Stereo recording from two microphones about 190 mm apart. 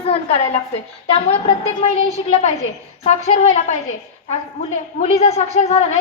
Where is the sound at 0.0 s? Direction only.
30° left (ahead or behind).